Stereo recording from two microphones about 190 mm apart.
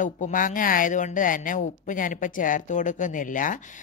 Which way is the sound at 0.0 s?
45° left (ahead or behind).